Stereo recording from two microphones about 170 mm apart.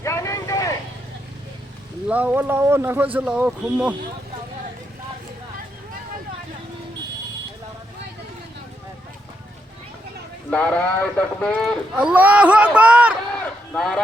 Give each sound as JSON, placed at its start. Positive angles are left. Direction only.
{"t": 0.0, "sound": "vehicle", "side_deg": 15}
{"t": 2.0, "sound": "speech", "side_deg": -10}
{"t": 10.5, "sound": "speech", "side_deg": 10}
{"t": 13.3, "sound": "run", "side_deg": 5}